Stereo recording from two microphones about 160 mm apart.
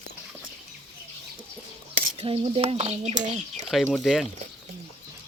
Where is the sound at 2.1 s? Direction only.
35° right (ahead or behind).